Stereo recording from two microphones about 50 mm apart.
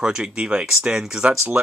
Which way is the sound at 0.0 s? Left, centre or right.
Centre.